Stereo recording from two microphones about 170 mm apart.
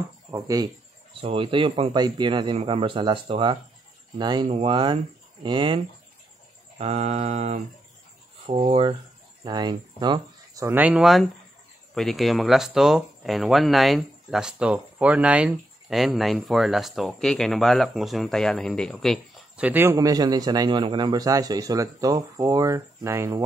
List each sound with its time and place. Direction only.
0.3 s speech: 20° right (ahead or behind)
6.8 s mantra: 40° right (ahead or behind)
9.4 s speech: 25° right (ahead or behind)